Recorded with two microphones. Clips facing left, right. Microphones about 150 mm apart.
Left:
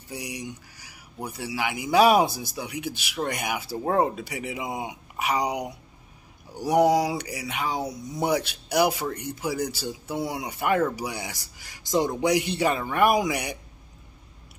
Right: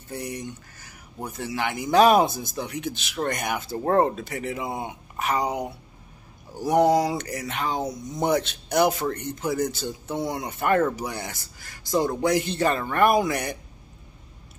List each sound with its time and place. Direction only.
0.1 s speech: 10° left (ahead or behind)